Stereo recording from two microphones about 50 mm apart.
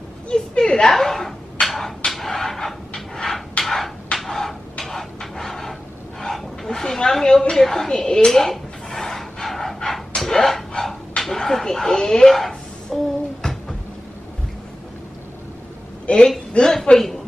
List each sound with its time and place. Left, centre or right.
0.3 s a woman's voice: centre
0.9 s a sound: centre
6.2 s dog: centre
7.5 s a sound: centre
10.8 s dog: centre
16.1 s a woman's voice: left
16.5 s a woman's voice: centre